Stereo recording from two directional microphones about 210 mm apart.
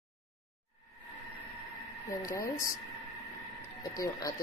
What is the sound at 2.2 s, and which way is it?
Speech, 15° left (ahead or behind).